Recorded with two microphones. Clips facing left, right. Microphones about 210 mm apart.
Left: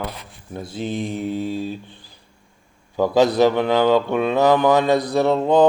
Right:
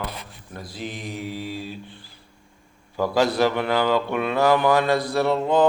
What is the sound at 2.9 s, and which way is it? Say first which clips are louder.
Mantra: left 5 dB; 20° left (ahead or behind).